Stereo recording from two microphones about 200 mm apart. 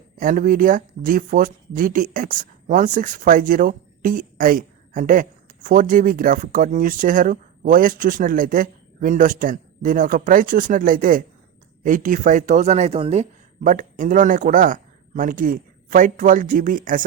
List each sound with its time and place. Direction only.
0.2 s speech: 40° right (ahead or behind)